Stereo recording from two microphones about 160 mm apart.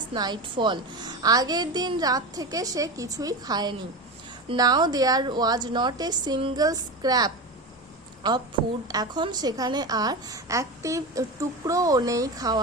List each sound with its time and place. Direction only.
0.1 s a woman's voice: 25° right (ahead or behind)